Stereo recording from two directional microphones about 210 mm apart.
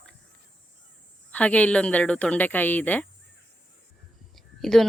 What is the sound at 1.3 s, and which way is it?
Speech, 5° left (ahead or behind).